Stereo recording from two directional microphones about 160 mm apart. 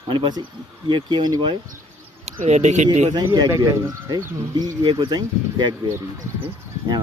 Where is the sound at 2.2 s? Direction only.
45° right (ahead or behind).